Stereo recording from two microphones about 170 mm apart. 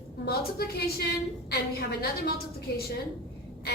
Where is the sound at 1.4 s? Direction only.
70° left (ahead or behind).